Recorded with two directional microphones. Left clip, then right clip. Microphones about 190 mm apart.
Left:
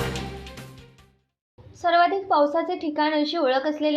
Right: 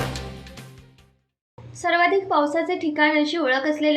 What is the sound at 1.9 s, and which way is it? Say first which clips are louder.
A woman's voice: even; 30° left (ahead or behind).